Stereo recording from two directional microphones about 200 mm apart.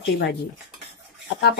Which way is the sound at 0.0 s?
55° left (ahead or behind).